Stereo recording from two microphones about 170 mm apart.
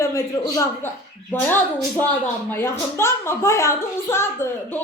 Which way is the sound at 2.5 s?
15° left (ahead or behind).